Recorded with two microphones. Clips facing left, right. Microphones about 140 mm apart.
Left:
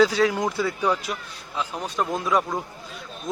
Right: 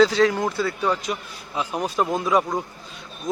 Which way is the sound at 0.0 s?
5° left (ahead or behind).